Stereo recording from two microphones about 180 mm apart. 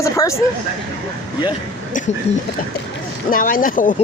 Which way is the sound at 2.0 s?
45° left (ahead or behind).